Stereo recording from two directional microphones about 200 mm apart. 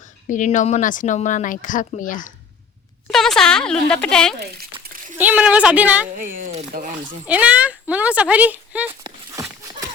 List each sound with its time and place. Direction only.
0.0 s speech: 40° left (ahead or behind)
3.1 s speech: centre (ahead or behind)
4.4 s a child's voice: 50° right (ahead or behind)
4.8 s splash: 45° right (ahead or behind)
5.1 s speech: 10° right (ahead or behind)
6.1 s speech: 40° right (ahead or behind)
7.3 s speech: 5° right (ahead or behind)
9.0 s a sound: 15° right (ahead or behind)